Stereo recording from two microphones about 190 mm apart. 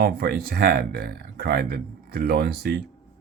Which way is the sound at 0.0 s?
50° right (ahead or behind).